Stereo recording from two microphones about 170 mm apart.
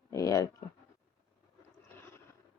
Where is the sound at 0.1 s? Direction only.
20° left (ahead or behind).